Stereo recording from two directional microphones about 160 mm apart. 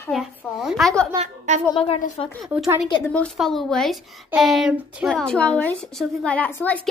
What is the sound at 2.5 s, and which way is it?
Speech, 5° right (ahead or behind).